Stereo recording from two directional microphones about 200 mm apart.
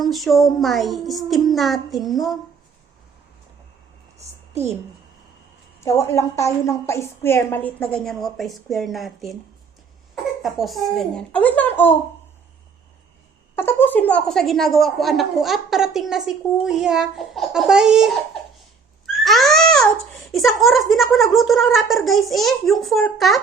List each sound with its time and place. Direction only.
0.0 s a woman's voice: centre (ahead or behind)
4.2 s a sound: 35° right (ahead or behind)
5.8 s a woman's voice: 15° left (ahead or behind)
10.4 s a woman's voice: centre (ahead or behind)
13.6 s a woman's voice: 10° left (ahead or behind)
19.2 s a woman's voice: centre (ahead or behind)